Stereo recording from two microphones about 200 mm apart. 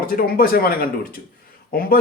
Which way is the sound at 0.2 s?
45° left (ahead or behind).